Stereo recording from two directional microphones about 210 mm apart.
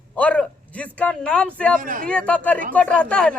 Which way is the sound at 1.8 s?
40° right (ahead or behind).